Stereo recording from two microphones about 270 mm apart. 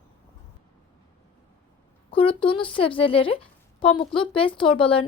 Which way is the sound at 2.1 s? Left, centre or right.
Centre.